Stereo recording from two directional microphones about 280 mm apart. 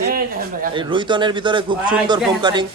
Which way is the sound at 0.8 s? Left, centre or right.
Centre.